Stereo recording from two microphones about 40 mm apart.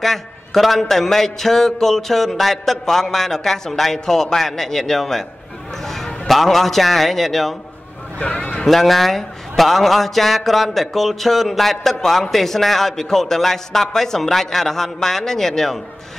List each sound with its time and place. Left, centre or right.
0.0 s a man's voice: centre
8.2 s speech: left
8.6 s a man's voice: centre